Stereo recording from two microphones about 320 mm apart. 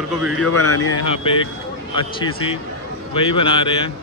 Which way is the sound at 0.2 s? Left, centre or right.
Centre.